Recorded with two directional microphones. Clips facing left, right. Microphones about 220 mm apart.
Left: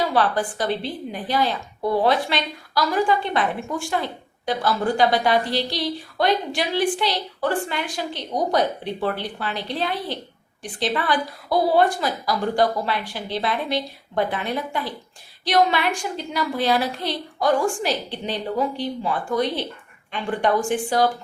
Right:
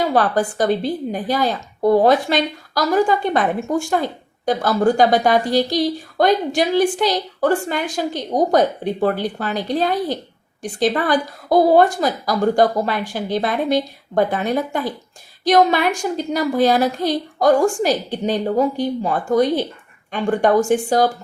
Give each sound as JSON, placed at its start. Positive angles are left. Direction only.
{"t": 0.1, "sound": "a woman's voice", "side_deg": -45}